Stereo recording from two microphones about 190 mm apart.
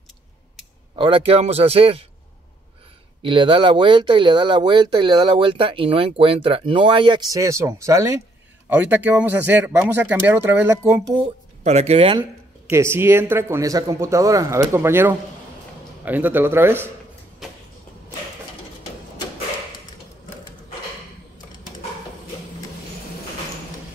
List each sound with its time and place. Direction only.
0.9 s a man's voice: 25° right (ahead or behind)
3.2 s speech: 25° right (ahead or behind)
11.6 s a man's voice: 35° right (ahead or behind)
12.2 s speech: 15° right (ahead or behind)